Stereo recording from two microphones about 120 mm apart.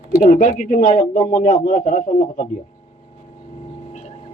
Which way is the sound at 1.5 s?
75° left (ahead or behind).